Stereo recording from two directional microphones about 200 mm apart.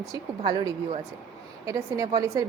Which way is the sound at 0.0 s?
20° right (ahead or behind).